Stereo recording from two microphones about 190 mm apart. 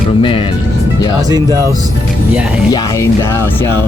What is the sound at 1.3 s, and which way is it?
Music, 20° right (ahead or behind).